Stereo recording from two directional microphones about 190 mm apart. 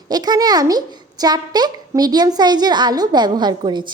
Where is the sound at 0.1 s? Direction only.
20° right (ahead or behind).